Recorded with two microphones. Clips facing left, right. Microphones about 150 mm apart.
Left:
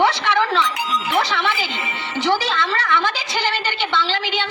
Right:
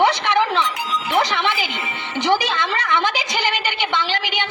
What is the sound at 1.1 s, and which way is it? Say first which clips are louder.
Music: right 2 dB; 15° right (ahead or behind).